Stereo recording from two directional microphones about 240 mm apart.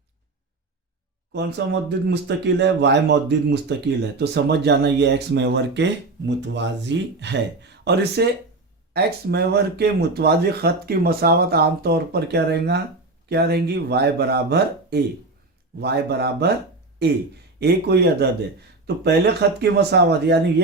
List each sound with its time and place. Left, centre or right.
1.3 s speech: right
17.6 s speech: right